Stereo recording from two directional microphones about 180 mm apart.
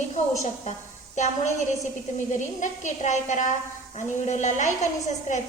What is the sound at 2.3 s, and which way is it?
A woman's voice, 45° left (ahead or behind).